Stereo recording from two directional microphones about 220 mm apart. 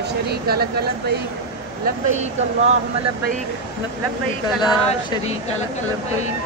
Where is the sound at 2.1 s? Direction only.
30° right (ahead or behind).